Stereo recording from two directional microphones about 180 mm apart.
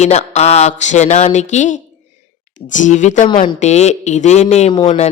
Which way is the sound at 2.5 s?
45° left (ahead or behind).